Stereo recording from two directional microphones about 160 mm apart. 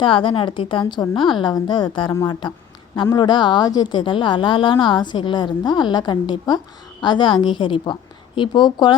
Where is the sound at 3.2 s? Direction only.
30° left (ahead or behind).